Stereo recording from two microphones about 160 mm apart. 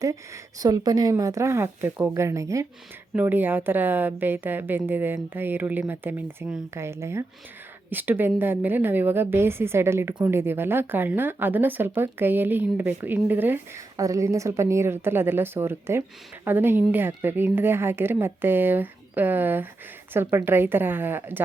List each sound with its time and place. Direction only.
0.6 s speech: 25° right (ahead or behind)